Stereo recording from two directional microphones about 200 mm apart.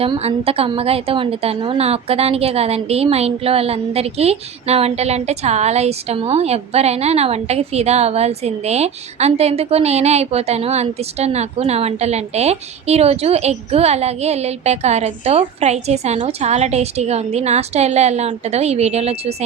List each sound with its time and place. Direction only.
0.0 s a woman's voice: 30° right (ahead or behind)